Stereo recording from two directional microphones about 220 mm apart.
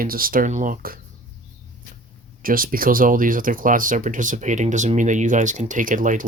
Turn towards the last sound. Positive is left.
turn(degrees=-35)  # may be behind; listen again after turning